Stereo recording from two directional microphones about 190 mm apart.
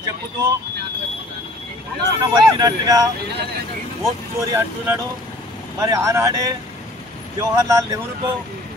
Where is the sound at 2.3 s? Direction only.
20° right (ahead or behind).